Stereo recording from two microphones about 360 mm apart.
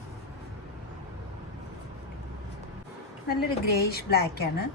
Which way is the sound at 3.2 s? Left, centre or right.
Left.